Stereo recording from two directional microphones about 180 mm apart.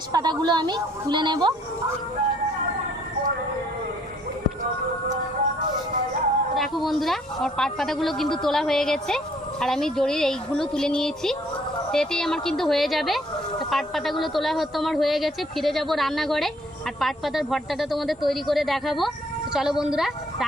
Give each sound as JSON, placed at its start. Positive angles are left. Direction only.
{"t": 0.1, "sound": "a woman's voice", "side_deg": -25}
{"t": 6.6, "sound": "speech", "side_deg": 0}